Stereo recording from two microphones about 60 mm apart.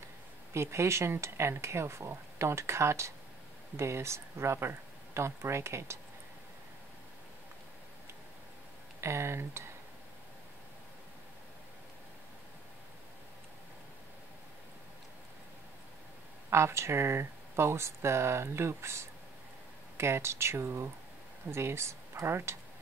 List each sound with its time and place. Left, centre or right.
0.5 s speech: right
9.0 s speech: right
16.4 s speech: right